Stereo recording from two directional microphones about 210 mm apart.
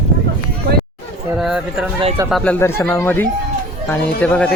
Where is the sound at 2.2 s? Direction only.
5° left (ahead or behind).